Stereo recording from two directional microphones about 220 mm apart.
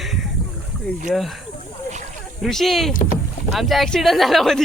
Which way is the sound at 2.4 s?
Centre (ahead or behind).